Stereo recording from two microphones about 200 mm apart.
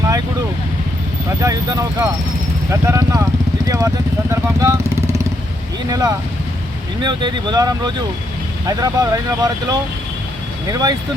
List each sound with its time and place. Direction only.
1.4 s speech: 15° right (ahead or behind)